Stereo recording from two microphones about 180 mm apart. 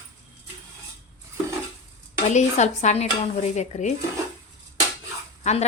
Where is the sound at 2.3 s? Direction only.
40° left (ahead or behind).